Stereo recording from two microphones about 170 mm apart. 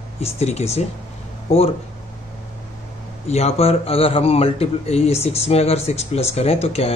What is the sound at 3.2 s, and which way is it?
Speech, 40° left (ahead or behind).